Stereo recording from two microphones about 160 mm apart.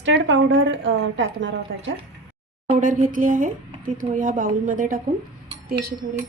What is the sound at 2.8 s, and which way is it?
A woman's voice, 55° right (ahead or behind).